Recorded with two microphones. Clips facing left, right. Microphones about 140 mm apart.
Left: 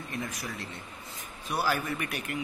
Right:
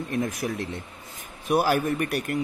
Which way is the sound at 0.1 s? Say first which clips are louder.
Right 9 dB; 50° right (ahead or behind).